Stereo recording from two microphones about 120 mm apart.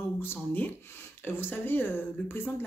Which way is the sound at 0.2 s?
15° left (ahead or behind).